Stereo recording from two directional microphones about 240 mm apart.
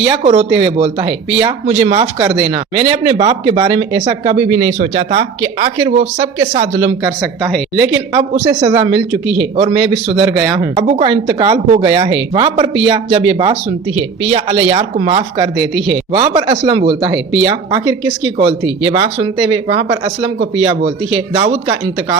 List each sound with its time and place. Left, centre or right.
0.2 s speech: right
7.0 s speech: centre
8.4 s speech: centre
10.8 s speech: right